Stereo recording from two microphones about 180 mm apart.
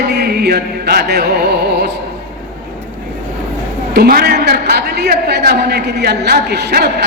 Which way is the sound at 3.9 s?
60° right (ahead or behind).